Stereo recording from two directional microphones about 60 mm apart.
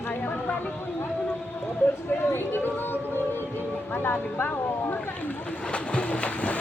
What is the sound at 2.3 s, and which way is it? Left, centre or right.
Speech, left.